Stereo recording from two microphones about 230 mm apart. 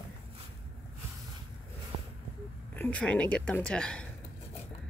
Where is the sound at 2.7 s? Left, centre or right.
Centre.